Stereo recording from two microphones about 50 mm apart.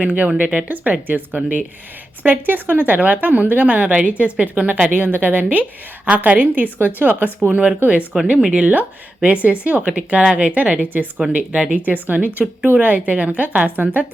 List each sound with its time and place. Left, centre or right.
0.0 s a woman's voice: right
8.4 s speech: centre
9.2 s a woman's voice: right